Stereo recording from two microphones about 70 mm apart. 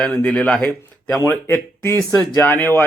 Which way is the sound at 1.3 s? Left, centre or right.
Left.